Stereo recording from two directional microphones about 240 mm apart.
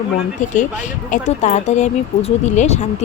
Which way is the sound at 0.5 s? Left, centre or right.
Left.